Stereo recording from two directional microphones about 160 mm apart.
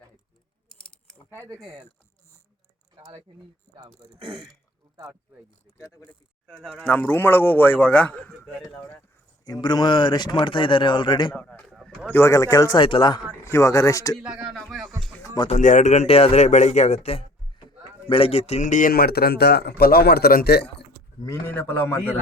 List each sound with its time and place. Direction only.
1.4 s speech: 20° right (ahead or behind)
2.9 s speech: 25° right (ahead or behind)
5.7 s a man's voice: 15° left (ahead or behind)
6.5 s a man's voice: 5° left (ahead or behind)
9.4 s speech: 25° left (ahead or behind)
11.3 s speech: 5° left (ahead or behind)
12.1 s speech: 20° left (ahead or behind)
14.2 s speech: 5° right (ahead or behind)
15.5 s a man's voice: 50° left (ahead or behind); by 20.8 s 90° left
21.4 s a man's voice: 10° left (ahead or behind)